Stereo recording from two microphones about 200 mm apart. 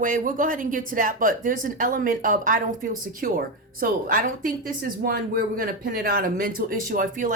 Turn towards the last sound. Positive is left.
turn(degrees=-45)  # may be behind; listen again after turning